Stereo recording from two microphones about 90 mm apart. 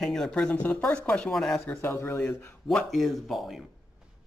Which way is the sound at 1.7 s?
30° left (ahead or behind).